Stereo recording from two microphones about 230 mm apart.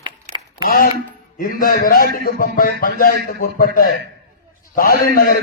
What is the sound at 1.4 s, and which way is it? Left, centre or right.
A man's voice, left.